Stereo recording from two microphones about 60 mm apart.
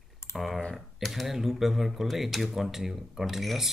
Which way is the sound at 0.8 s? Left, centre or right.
Centre.